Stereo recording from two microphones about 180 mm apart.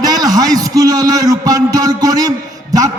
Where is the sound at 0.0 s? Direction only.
20° right (ahead or behind).